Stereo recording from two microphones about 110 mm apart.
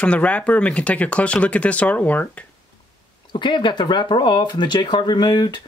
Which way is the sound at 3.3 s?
45° left (ahead or behind).